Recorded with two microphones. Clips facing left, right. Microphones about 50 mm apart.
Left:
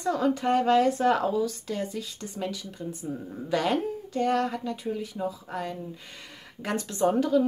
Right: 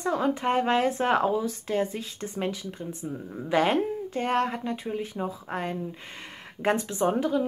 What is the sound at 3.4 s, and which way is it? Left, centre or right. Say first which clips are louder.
Speech: right 3 dB; right.